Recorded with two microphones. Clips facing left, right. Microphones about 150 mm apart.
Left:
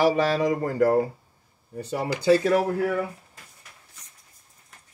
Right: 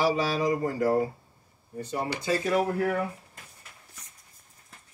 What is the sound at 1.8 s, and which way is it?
Speech, 70° left (ahead or behind).